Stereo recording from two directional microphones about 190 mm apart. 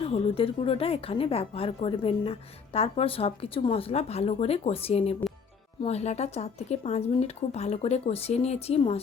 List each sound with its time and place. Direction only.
0.1 s a woman's voice: 30° left (ahead or behind)